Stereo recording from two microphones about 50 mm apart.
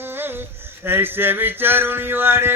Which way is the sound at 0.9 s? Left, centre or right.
Right.